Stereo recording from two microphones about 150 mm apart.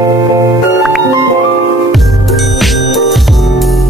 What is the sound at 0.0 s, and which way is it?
Music, 25° right (ahead or behind).